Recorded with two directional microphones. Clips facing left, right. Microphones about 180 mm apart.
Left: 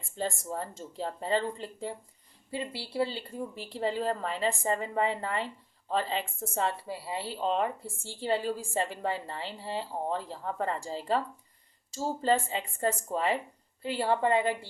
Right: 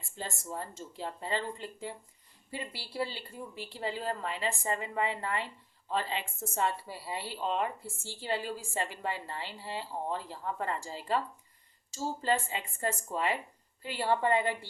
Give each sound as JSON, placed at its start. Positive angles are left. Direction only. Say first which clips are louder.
{"t": 0.2, "sound": "speech", "louder": "left 6 dB", "side_deg": 35}
{"t": 12.2, "sound": "a woman's voice", "louder": "left 4 dB", "side_deg": 35}